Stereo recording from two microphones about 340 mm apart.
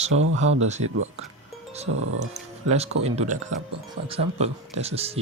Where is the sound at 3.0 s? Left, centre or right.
Centre.